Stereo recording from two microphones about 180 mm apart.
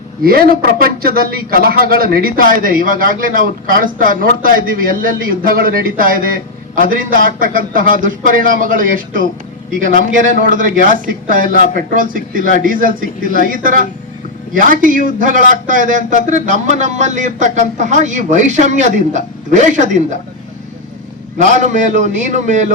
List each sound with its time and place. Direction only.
0.3 s speech: 55° right (ahead or behind)
21.3 s speech: 45° right (ahead or behind)